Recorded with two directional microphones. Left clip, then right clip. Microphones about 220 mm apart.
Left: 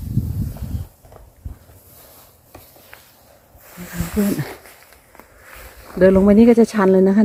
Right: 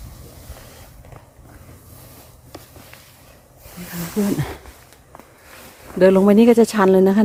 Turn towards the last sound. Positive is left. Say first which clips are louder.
# even
turn(degrees=-10)  # may be behind; listen again after turning